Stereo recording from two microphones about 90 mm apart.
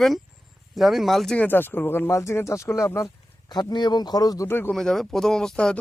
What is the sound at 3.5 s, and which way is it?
Speech, 55° left (ahead or behind).